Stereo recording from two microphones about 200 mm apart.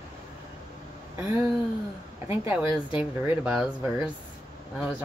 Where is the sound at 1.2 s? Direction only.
15° right (ahead or behind).